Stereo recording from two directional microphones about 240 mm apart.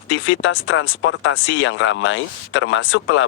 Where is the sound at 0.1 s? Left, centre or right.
Left.